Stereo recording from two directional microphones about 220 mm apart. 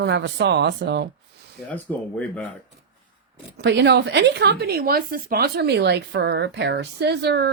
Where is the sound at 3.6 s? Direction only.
50° right (ahead or behind).